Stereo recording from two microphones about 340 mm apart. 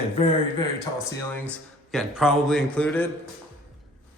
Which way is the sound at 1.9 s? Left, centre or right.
Centre.